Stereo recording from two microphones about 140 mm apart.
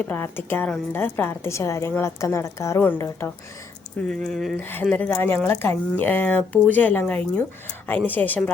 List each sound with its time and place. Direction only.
0.0 s a woman's voice: 15° left (ahead or behind)
4.5 s speech: 15° left (ahead or behind)